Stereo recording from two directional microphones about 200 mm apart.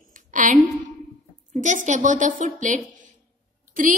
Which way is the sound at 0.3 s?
40° right (ahead or behind).